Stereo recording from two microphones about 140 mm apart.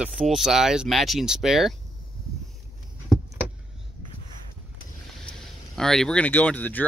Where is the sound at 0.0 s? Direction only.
5° right (ahead or behind).